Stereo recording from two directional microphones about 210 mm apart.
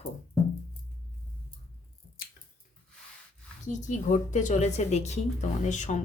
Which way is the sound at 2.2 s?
45° left (ahead or behind).